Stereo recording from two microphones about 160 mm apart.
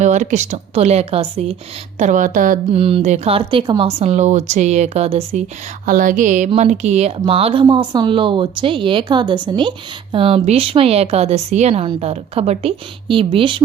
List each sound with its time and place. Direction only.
0.0 s speech: 45° right (ahead or behind)
2.0 s speech: 50° right (ahead or behind)
2.7 s a woman's voice: 35° right (ahead or behind)
5.8 s a sound: 55° right (ahead or behind)
6.5 s a woman's voice: 45° right (ahead or behind)